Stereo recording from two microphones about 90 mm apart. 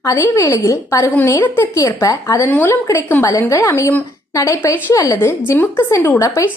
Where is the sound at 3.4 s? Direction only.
35° left (ahead or behind).